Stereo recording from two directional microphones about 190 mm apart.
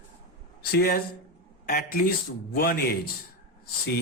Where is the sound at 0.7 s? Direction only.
55° left (ahead or behind).